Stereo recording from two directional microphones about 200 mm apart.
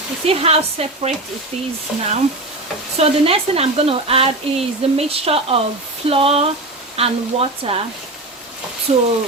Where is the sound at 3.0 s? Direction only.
30° right (ahead or behind).